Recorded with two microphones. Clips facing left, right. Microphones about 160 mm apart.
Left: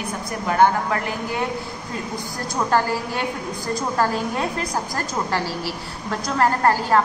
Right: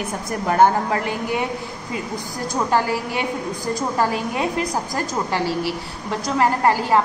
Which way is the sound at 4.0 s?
15° right (ahead or behind).